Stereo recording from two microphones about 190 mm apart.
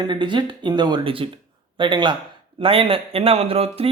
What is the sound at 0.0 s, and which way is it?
Speech, 25° right (ahead or behind).